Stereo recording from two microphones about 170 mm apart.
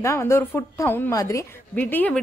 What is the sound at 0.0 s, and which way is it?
A woman's voice, 15° left (ahead or behind).